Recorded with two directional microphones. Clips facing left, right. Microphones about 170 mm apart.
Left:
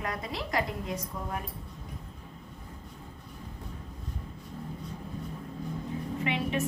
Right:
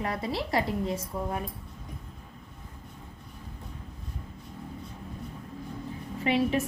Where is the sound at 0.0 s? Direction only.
30° right (ahead or behind).